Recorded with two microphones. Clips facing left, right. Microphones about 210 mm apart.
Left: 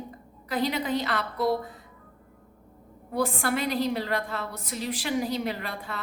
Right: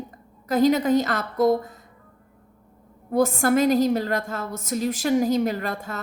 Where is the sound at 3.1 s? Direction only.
45° right (ahead or behind).